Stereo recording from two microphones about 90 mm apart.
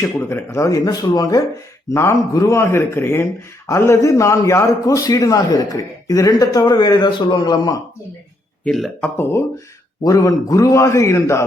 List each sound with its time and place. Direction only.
0.0 s a man's voice: 30° left (ahead or behind); by 7.8 s 45° left (ahead or behind)
10.0 s a man's voice: 40° left (ahead or behind)